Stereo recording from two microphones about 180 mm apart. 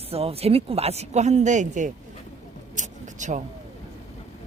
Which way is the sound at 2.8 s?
45° right (ahead or behind).